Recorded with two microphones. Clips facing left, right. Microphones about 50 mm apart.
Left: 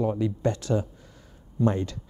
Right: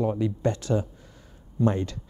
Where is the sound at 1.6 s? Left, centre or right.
Right.